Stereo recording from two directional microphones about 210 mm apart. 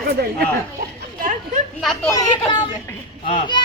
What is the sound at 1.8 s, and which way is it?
Speech, centre (ahead or behind).